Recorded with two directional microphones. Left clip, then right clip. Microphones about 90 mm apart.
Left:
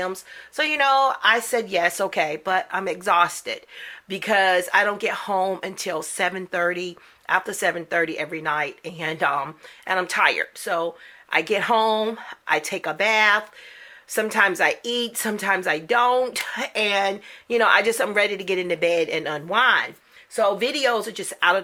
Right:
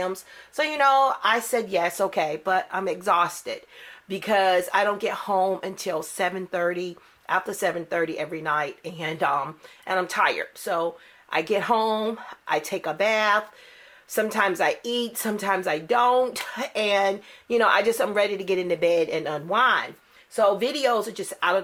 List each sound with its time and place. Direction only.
0.0 s speech: 30° left (ahead or behind)